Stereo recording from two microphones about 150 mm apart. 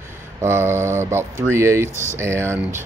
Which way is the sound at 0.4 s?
15° right (ahead or behind).